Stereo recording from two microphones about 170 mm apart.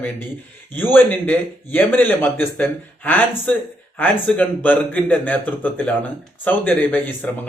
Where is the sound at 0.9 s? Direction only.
10° left (ahead or behind).